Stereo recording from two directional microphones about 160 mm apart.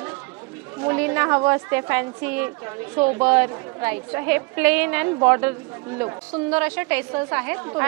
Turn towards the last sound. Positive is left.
turn(degrees=-20)  # may be behind; listen again after turning